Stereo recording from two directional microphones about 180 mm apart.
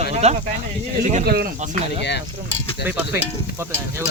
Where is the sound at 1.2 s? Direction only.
60° right (ahead or behind).